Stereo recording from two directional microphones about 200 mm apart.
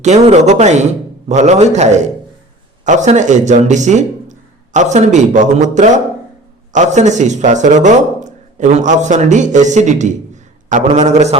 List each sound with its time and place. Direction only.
0.0 s speech: 35° right (ahead or behind)